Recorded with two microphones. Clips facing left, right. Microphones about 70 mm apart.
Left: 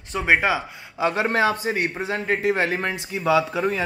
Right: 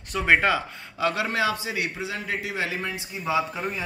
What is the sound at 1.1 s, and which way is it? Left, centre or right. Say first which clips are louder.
A man's voice: left 4 dB; left.